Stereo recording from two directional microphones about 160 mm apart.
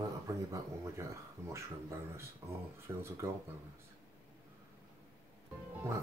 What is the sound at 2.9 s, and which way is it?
Speech, 15° right (ahead or behind).